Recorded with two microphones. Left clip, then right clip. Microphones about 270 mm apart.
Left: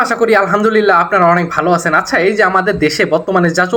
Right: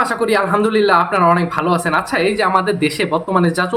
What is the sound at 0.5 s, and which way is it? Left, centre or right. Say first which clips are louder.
Speech: left 3 dB; centre.